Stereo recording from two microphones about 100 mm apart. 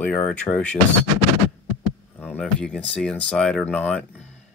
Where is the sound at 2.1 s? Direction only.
15° left (ahead or behind).